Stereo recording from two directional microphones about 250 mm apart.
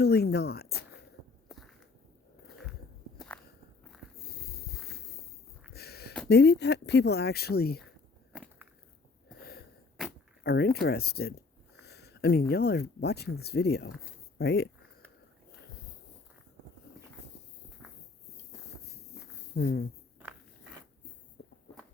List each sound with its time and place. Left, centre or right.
0.0 s speech: left
1.5 s walk: centre
3.2 s walk: centre
4.2 s a sound: left
6.2 s speech: left
8.3 s a sound: centre
9.4 s wheeze: left
10.4 s speech: left
19.5 s speech: left